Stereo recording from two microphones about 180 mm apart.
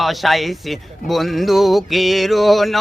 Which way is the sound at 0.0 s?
Centre (ahead or behind).